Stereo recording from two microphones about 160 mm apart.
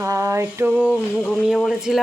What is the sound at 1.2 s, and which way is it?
Speech, 10° left (ahead or behind).